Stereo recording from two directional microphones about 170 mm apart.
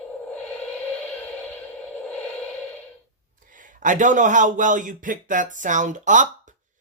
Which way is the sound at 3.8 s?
50° right (ahead or behind).